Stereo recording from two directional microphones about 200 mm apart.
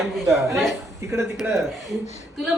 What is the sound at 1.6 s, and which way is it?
Speech, centre (ahead or behind).